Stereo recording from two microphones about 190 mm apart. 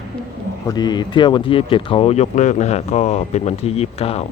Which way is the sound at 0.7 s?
20° left (ahead or behind).